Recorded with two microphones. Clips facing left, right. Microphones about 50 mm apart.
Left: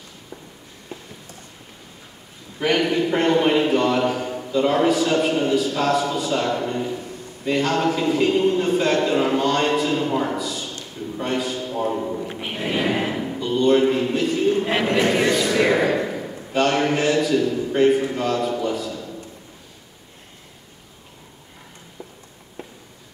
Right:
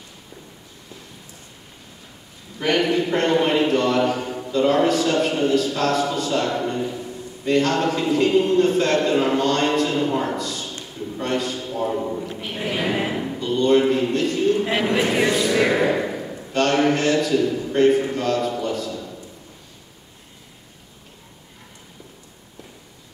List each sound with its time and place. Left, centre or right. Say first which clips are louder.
2.6 s a man's voice: even; centre
12.3 s speech: left 1 dB; left
12.7 s a man's voice: left 1 dB; centre
14.6 s a sound: even; centre
15.1 s speech: even; centre
15.5 s a sound: even; centre
18.1 s a man's voice: even; centre